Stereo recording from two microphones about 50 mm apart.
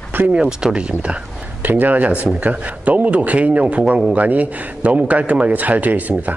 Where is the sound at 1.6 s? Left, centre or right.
Right.